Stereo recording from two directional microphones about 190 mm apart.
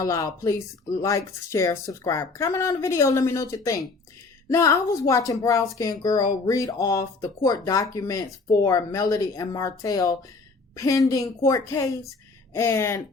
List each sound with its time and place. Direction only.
0.0 s speech: 15° left (ahead or behind)